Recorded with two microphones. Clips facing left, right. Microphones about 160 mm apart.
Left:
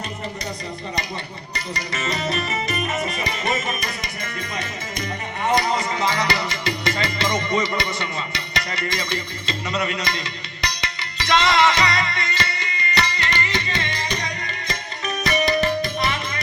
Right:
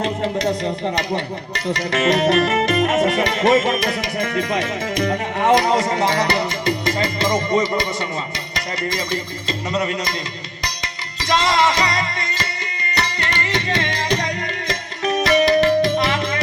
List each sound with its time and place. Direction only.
0.0 s speech: 90° right; by 5.7 s 60° right (ahead or behind)
5.7 s speech: 80° right; by 6.2 s 60° right (ahead or behind)
6.3 s music: 50° right (ahead or behind)
7.3 s speech: 45° right (ahead or behind)
8.9 s speech: 45° right (ahead or behind)
9.8 s music: 40° right (ahead or behind)
11.3 s music: 40° right (ahead or behind)
13.1 s music: 55° right (ahead or behind); by 16.4 s 90° right